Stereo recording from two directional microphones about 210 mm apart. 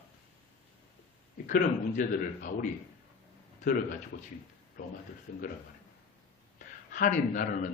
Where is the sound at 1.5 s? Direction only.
40° left (ahead or behind).